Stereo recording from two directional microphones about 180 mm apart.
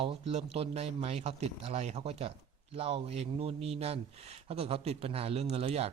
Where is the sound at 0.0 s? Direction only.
35° right (ahead or behind).